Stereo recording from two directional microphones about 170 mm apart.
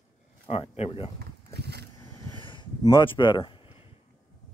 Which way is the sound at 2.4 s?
30° left (ahead or behind).